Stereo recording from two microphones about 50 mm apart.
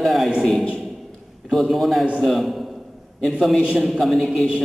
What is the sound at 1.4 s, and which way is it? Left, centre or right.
Speech, centre.